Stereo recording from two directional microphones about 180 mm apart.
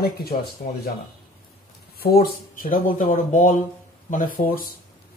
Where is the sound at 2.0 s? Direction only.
55° left (ahead or behind).